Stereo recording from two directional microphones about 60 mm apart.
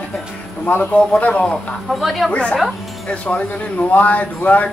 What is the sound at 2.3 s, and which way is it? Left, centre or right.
Speech, left.